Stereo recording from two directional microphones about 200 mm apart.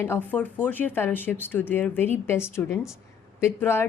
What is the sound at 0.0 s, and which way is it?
A woman's voice, 10° left (ahead or behind).